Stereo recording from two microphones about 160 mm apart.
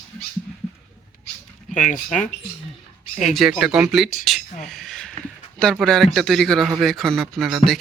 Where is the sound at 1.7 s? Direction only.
50° left (ahead or behind).